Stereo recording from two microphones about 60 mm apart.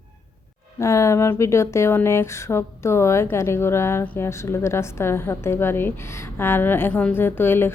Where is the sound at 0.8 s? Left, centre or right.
Left.